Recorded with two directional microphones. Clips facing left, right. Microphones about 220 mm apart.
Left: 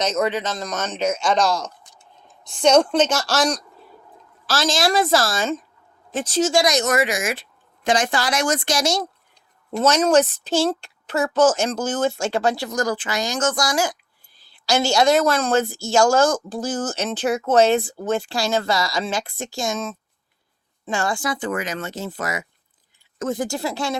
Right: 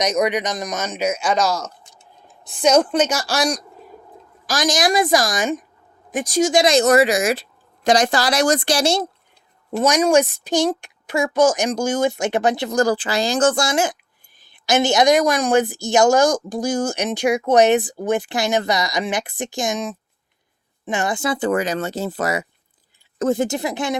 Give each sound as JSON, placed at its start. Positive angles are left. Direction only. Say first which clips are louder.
{"t": 0.0, "sound": "a woman's voice", "louder": "right 2 dB", "side_deg": -15}
{"t": 9.7, "sound": "a woman's voice", "louder": "right 1 dB", "side_deg": -10}
{"t": 12.7, "sound": "a woman's voice", "louder": "right 5 dB", "side_deg": -30}
{"t": 21.3, "sound": "a woman's voice", "louder": "right 6 dB", "side_deg": -35}